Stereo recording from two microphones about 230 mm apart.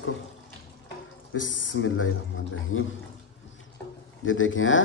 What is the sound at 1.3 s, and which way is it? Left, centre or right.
A man's voice, left.